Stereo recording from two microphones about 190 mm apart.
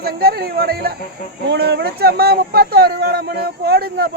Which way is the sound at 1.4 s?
65° right (ahead or behind).